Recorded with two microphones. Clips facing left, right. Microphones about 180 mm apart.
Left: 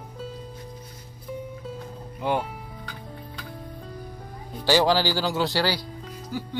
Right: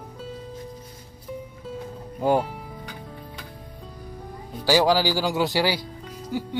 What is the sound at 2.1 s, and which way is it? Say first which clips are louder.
Speech: right 5 dB; 40° right (ahead or behind).